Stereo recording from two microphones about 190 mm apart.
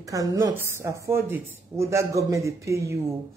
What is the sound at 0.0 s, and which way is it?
A man's voice, 15° right (ahead or behind).